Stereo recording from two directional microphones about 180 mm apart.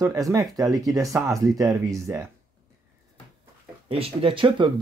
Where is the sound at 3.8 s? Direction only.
30° right (ahead or behind).